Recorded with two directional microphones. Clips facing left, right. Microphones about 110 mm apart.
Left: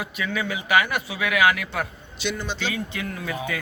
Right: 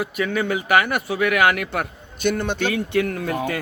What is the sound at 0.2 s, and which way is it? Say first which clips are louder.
A man's voice: right 5 dB; 45° right (ahead or behind).